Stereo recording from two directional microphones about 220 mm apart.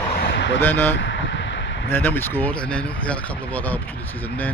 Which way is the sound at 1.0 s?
55° left (ahead or behind).